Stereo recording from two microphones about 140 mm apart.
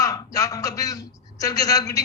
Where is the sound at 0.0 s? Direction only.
25° left (ahead or behind).